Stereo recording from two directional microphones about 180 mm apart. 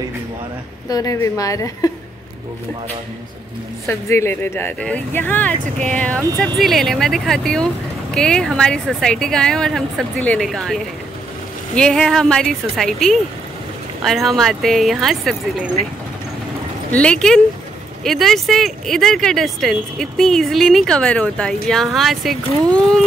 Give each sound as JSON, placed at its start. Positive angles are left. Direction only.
{"t": 0.8, "sound": "a woman's voice", "side_deg": 20}
{"t": 3.8, "sound": "speech", "side_deg": 15}
{"t": 16.9, "sound": "speech", "side_deg": 5}